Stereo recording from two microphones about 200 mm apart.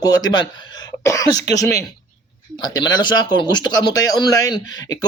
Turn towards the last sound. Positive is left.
turn(degrees=20)  # may be behind; listen again after turning